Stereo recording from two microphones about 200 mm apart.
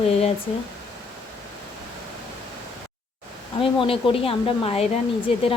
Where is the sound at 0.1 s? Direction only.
30° left (ahead or behind).